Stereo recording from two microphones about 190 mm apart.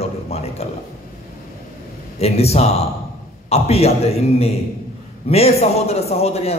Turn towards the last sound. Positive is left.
turn(degrees=35)  # may be behind; listen again after turning